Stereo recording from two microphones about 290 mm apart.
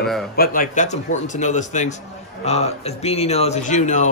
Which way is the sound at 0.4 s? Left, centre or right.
Left.